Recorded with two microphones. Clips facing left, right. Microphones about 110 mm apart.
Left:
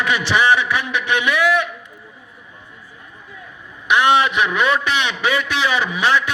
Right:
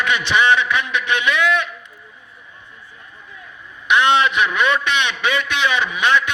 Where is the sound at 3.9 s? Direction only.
15° left (ahead or behind).